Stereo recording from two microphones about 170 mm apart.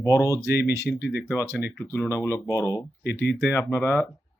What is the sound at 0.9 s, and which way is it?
Speech, 75° left (ahead or behind).